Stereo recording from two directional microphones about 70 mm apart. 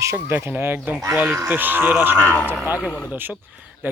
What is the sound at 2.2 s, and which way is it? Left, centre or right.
Speech, left.